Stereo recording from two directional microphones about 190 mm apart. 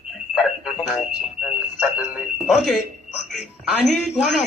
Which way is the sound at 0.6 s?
5° right (ahead or behind).